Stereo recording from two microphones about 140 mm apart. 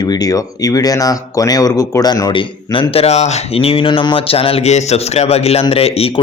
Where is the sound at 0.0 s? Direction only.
25° left (ahead or behind).